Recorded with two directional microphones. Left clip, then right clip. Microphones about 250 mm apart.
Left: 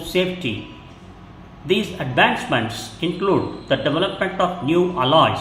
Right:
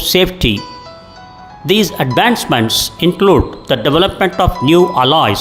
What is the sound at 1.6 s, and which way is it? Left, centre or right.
Speech, right.